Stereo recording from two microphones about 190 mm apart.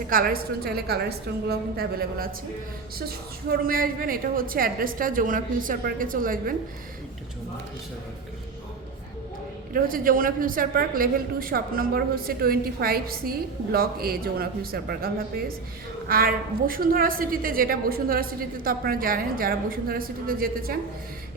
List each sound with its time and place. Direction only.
0.1 s a woman's voice: 50° right (ahead or behind)
9.7 s a woman's voice: 50° right (ahead or behind)